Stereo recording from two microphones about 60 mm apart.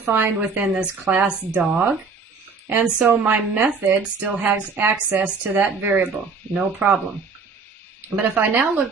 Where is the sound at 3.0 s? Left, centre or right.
Right.